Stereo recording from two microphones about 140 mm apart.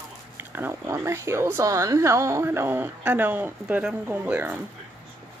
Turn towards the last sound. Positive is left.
turn(degrees=-10)  # may be behind; listen again after turning